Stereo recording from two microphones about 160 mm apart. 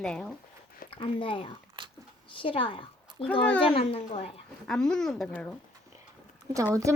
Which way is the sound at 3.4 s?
10° left (ahead or behind).